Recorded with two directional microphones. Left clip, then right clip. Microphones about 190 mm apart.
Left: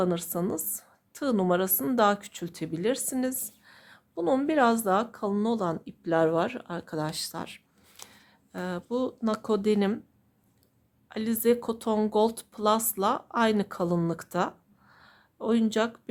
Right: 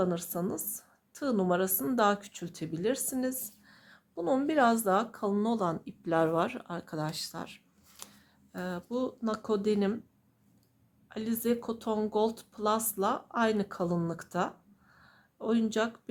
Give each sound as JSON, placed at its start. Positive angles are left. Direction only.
{"t": 0.0, "sound": "speech", "side_deg": 30}
{"t": 11.1, "sound": "speech", "side_deg": 30}
{"t": 14.9, "sound": "a sound", "side_deg": 30}